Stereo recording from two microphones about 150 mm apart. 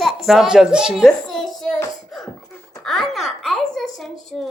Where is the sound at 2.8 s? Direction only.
Centre (ahead or behind).